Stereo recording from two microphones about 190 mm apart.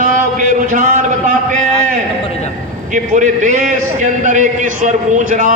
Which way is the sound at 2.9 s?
40° right (ahead or behind).